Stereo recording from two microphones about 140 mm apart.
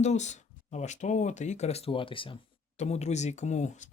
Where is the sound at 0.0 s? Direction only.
55° left (ahead or behind); by 2.4 s 40° left (ahead or behind).